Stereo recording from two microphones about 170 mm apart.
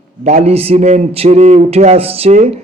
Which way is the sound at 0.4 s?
35° right (ahead or behind).